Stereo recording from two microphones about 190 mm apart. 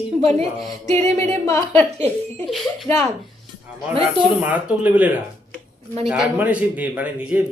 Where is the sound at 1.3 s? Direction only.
15° left (ahead or behind).